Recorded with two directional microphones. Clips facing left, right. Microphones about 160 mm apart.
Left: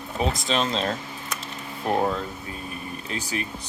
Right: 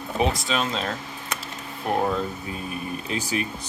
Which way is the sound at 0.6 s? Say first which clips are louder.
Left 2 dB; 25° left (ahead or behind).